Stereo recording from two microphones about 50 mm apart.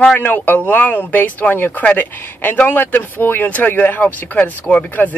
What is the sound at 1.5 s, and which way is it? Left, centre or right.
Speech, left.